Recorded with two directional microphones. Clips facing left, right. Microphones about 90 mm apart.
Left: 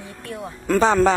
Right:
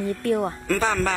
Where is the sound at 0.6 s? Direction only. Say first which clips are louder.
Left 6 dB; 25° left (ahead or behind).